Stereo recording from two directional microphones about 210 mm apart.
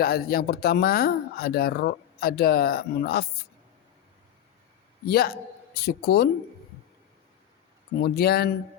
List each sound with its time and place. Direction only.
0.0 s speech: 45° left (ahead or behind)
5.0 s speech: 45° left (ahead or behind)
8.0 s speech: 50° left (ahead or behind)